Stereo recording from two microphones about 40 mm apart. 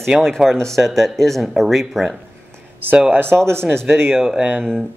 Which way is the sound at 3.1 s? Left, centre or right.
Right.